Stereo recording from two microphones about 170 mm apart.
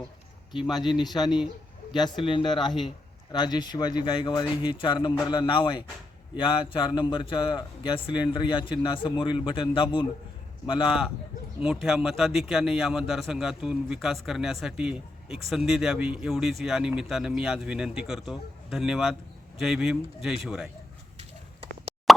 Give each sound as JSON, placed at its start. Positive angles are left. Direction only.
{"t": 0.7, "sound": "a man's voice", "side_deg": 25}
{"t": 11.6, "sound": "a man's voice", "side_deg": 0}